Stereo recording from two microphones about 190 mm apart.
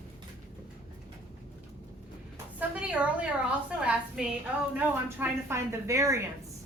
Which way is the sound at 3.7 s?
5° right (ahead or behind).